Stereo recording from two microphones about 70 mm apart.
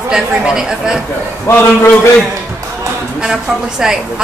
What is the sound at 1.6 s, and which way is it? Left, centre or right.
Speech, left.